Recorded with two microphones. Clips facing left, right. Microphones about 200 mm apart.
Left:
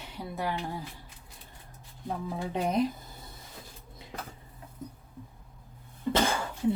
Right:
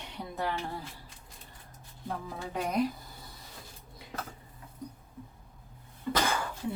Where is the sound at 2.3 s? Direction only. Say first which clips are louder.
Left 4 dB; 20° left (ahead or behind).